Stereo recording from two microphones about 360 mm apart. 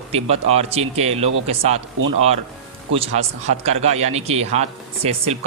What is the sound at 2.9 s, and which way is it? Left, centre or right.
Speech, centre.